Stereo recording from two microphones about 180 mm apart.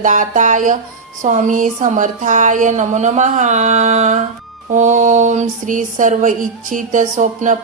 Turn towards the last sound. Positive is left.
turn(degrees=-45)  # may be behind; listen again after turning